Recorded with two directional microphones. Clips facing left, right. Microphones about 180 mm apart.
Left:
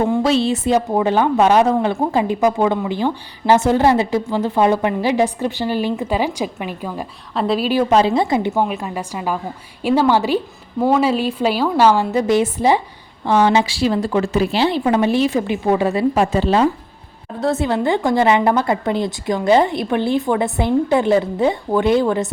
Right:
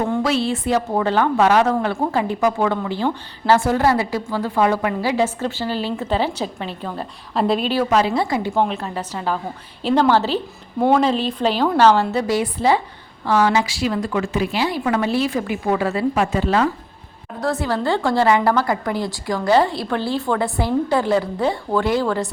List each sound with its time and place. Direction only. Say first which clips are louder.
0.2 s a woman's voice: left 4 dB; 25° left (ahead or behind)
7.3 s a woman's voice: even; centre (ahead or behind)
7.7 s a woman's voice: left 3 dB; 20° left (ahead or behind)
12.2 s a woman's voice: left 3 dB; 25° left (ahead or behind)